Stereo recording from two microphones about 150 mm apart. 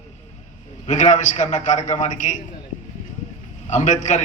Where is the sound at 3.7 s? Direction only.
55° left (ahead or behind).